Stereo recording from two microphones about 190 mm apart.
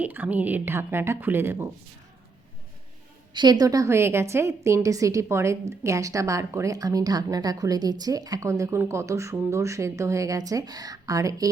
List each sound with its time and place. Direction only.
0.0 s a woman's voice: 10° right (ahead or behind)
3.3 s a woman's voice: 20° right (ahead or behind)